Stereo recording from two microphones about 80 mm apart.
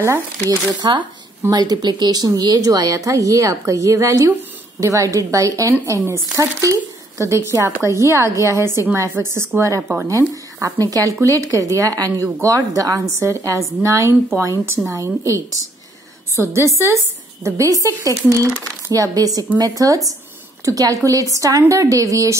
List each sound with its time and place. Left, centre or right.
0.0 s speech: right
0.7 s speech: right
1.5 s a woman's voice: right